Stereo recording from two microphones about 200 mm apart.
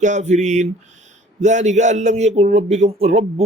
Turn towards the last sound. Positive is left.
turn(degrees=-35)  # may be behind; listen again after turning